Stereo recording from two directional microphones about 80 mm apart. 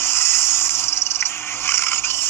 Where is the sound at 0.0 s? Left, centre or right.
Left.